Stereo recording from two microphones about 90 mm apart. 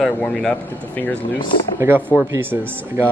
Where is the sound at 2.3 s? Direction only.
25° right (ahead or behind).